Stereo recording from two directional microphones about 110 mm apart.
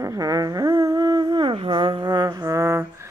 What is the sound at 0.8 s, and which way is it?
Music, 35° right (ahead or behind).